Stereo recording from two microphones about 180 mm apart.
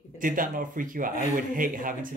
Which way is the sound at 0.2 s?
50° right (ahead or behind).